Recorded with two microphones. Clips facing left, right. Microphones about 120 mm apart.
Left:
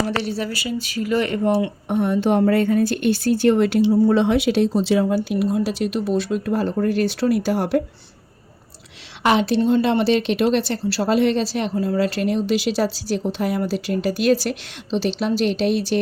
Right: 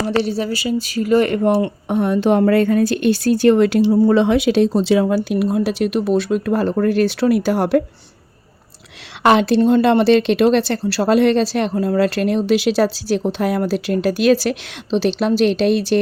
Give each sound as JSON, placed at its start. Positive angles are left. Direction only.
{"t": 0.2, "sound": "speech", "side_deg": -30}
{"t": 1.3, "sound": "speech", "side_deg": -60}
{"t": 9.2, "sound": "speech", "side_deg": -90}